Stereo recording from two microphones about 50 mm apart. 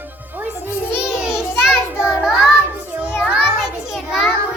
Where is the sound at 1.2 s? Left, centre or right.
Centre.